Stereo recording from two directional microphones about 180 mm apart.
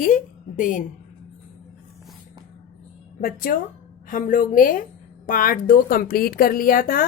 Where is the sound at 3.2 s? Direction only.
50° left (ahead or behind).